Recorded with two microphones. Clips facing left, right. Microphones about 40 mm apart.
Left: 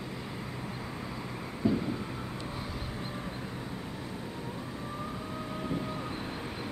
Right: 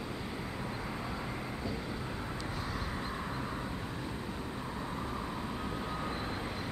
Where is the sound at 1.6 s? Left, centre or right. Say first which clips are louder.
Left 13 dB; left.